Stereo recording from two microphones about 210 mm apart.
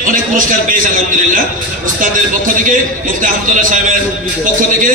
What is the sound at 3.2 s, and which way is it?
Speech, 40° right (ahead or behind).